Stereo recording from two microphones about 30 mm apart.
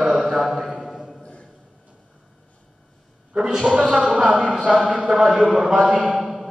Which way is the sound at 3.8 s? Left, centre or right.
Right.